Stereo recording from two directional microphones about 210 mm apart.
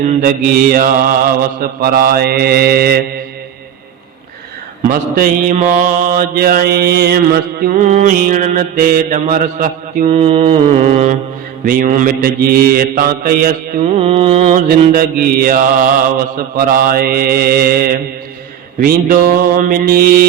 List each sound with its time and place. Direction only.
0.0 s mantra: 40° right (ahead or behind)
4.8 s mantra: 40° right (ahead or behind)
14.9 s mantra: 45° right (ahead or behind)